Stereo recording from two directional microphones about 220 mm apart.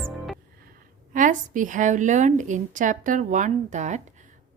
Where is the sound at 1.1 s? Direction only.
35° right (ahead or behind).